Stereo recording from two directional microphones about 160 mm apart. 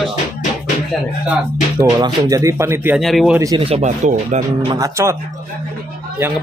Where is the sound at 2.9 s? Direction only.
Centre (ahead or behind).